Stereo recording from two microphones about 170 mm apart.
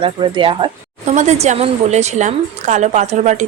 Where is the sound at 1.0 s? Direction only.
45° right (ahead or behind).